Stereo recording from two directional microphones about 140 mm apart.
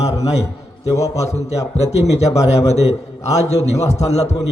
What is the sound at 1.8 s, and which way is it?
A man's voice, 50° left (ahead or behind).